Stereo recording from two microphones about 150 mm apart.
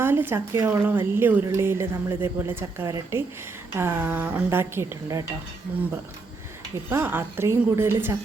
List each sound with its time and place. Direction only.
0.0 s speech: 15° right (ahead or behind)
6.9 s speech: 15° right (ahead or behind)